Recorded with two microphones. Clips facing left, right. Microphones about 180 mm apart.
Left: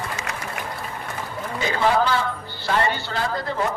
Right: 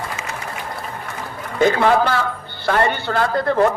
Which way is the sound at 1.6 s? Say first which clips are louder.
Right 6 dB; 55° right (ahead or behind).